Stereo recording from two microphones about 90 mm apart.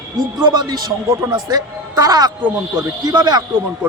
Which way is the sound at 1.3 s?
45° right (ahead or behind).